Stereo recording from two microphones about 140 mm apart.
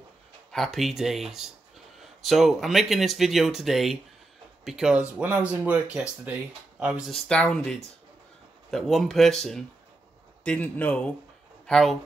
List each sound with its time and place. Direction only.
0.5 s a man's voice: centre (ahead or behind)